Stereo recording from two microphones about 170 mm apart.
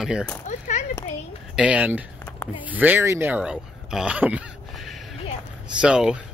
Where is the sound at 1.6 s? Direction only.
5° right (ahead or behind).